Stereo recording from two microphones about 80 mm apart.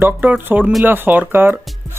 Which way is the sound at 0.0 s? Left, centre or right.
Centre.